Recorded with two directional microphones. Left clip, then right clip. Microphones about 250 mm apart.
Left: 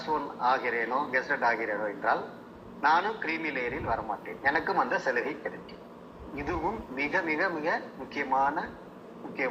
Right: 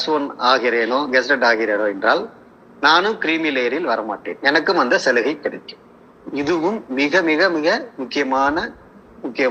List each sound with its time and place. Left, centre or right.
0.0 s a man's voice: right